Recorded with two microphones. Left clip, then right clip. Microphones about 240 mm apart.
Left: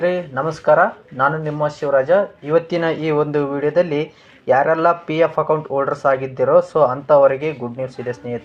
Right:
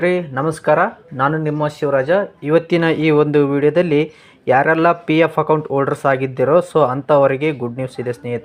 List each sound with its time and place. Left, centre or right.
0.0 s speech: right